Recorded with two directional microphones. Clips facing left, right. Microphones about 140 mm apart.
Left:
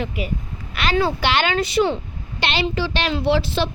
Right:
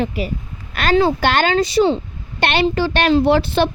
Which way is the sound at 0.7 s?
45° right (ahead or behind).